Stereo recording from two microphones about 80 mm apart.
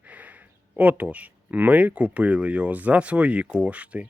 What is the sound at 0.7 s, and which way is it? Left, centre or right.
Speech, centre.